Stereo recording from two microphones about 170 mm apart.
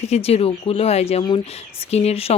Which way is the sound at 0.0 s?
35° left (ahead or behind).